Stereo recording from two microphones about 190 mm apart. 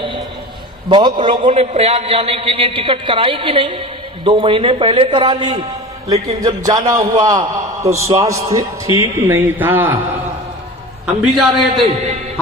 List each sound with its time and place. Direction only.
0.9 s a man's voice: 25° right (ahead or behind)
6.9 s a man's voice: 20° right (ahead or behind)
11.0 s a man's voice: centre (ahead or behind)